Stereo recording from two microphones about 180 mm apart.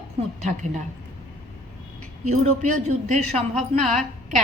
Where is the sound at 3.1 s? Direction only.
40° right (ahead or behind).